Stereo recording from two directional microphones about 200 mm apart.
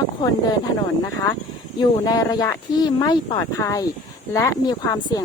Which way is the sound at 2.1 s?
20° left (ahead or behind).